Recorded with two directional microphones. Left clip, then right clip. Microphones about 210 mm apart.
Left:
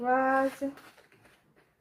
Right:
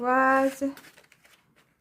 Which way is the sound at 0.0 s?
30° right (ahead or behind).